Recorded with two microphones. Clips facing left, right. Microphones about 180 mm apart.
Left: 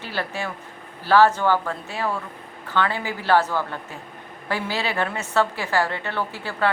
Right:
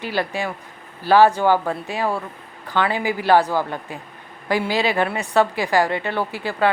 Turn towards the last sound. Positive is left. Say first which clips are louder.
# right 4 dB
turn(degrees=-15)  # may be behind; listen again after turning